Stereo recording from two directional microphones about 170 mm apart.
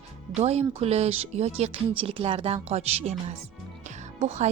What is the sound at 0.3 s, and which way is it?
Speech, 40° right (ahead or behind).